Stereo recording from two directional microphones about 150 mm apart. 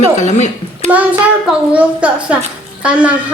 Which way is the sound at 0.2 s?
50° left (ahead or behind).